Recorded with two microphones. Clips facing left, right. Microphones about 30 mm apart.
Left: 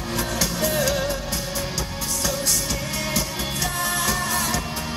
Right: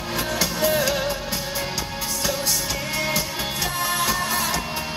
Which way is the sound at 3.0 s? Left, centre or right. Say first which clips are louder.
Right 3 dB; centre.